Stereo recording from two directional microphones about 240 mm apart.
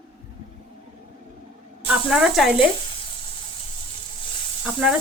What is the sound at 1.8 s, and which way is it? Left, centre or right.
Speech, centre.